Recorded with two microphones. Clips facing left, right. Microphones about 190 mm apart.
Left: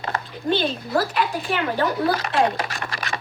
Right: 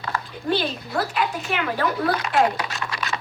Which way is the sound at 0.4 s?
40° left (ahead or behind).